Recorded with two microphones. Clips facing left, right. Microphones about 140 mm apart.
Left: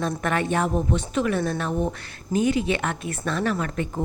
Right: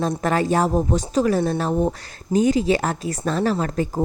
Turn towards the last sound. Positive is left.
turn(degrees=-35)  # may be behind; listen again after turning